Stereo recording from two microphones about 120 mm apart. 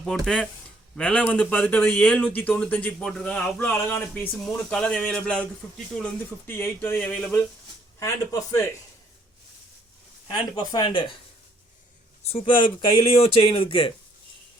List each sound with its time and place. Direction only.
0.0 s speech: 5° left (ahead or behind)
4.4 s speech: 5° left (ahead or behind)
6.5 s speech: 20° left (ahead or behind)
7.9 s a man's voice: 25° left (ahead or behind)
10.2 s speech: 40° left (ahead or behind)
12.2 s speech: 60° left (ahead or behind)